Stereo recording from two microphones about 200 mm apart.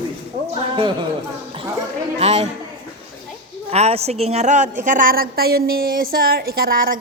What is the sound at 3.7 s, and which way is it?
A woman's voice, 30° right (ahead or behind).